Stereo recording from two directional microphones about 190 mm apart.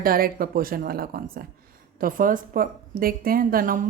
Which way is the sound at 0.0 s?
50° right (ahead or behind).